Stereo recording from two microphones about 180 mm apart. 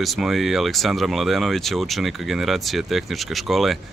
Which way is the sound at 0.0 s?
Centre (ahead or behind).